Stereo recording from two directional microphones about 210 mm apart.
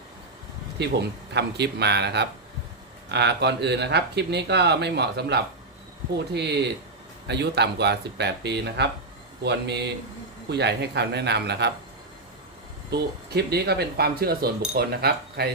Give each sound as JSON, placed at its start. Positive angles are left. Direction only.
{"t": 0.8, "sound": "speech", "side_deg": -55}
{"t": 12.9, "sound": "speech", "side_deg": -50}